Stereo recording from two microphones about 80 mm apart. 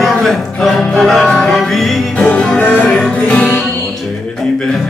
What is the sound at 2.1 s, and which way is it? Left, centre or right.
Music, centre.